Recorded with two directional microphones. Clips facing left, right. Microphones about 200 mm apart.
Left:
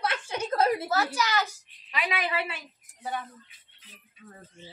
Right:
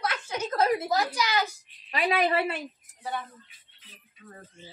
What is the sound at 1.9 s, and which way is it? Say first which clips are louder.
Speech: right 6 dB; 40° right (ahead or behind).